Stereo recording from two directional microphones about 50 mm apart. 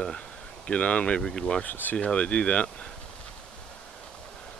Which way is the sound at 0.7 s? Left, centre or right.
Left.